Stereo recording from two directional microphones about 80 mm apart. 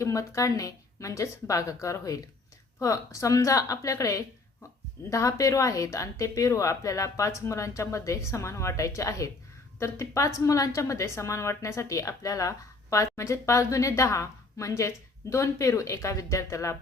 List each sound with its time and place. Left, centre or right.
0.0 s a woman's voice: left